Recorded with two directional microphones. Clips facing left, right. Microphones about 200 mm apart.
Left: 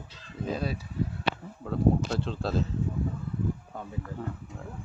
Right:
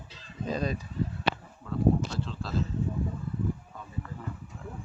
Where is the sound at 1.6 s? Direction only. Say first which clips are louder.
Left 1 dB; 60° left (ahead or behind).